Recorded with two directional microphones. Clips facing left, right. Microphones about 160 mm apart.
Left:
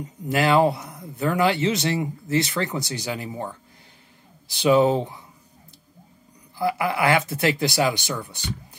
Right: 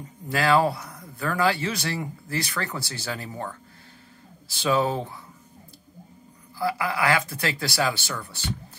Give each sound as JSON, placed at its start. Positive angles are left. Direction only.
{"t": 0.0, "sound": "a man's voice", "side_deg": 20}
{"t": 6.6, "sound": "a man's voice", "side_deg": 25}